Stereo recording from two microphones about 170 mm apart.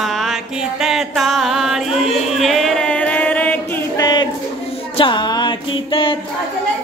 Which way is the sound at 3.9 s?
25° left (ahead or behind).